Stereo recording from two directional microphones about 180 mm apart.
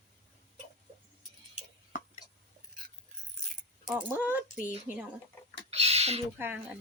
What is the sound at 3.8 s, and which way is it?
Speech, 10° right (ahead or behind).